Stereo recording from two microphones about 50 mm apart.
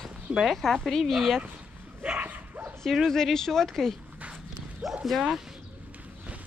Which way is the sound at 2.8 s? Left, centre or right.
Centre.